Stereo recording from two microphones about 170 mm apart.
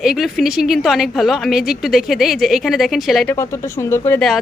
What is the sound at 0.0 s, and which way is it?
A woman's voice, centre (ahead or behind).